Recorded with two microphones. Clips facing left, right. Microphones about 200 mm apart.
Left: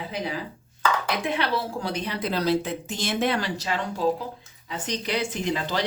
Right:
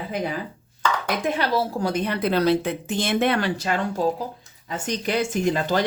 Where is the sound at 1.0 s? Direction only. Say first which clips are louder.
Right 2 dB; 45° right (ahead or behind).